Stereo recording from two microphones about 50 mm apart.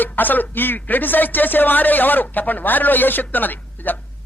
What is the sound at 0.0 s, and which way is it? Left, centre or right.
A woman's voice, left.